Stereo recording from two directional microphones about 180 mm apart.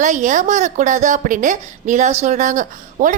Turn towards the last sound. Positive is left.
turn(degrees=-45)  # may be behind; listen again after turning